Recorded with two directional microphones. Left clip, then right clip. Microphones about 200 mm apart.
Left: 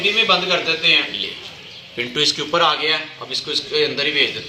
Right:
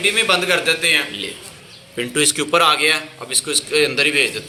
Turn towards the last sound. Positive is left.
turn(degrees=-50)  # may be behind; listen again after turning